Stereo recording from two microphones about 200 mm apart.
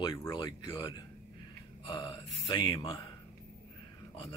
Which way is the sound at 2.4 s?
20° left (ahead or behind).